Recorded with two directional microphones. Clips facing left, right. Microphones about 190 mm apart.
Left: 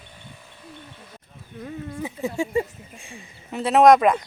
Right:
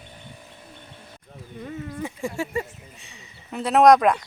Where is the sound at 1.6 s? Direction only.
5° left (ahead or behind).